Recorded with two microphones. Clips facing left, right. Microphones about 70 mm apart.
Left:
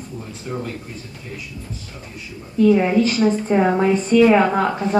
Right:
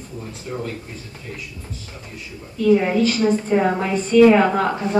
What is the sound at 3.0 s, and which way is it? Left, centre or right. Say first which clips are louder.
Speech: left 1 dB; left.